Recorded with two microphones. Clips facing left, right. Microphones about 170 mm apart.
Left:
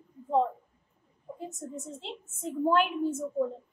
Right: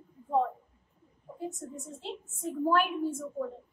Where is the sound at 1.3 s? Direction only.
20° left (ahead or behind).